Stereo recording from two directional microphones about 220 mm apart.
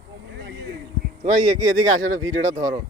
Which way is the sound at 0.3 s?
50° right (ahead or behind).